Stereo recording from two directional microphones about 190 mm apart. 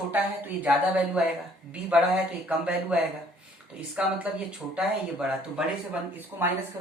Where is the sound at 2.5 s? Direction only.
5° right (ahead or behind).